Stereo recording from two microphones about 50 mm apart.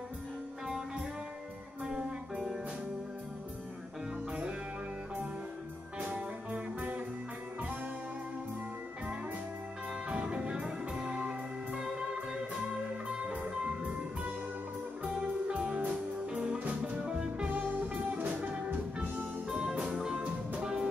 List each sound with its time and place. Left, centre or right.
0.7 s music: centre
4.3 s music: right
5.9 s music: right
10.0 s music: right
13.2 s music: right
16.5 s music: right
16.9 s music: centre
17.5 s music: right; by 20.9 s centre